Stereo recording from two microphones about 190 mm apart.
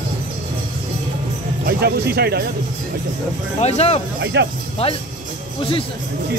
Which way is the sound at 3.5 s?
35° left (ahead or behind).